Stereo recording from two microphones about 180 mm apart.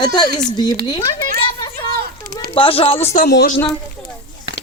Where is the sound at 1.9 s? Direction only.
60° right (ahead or behind).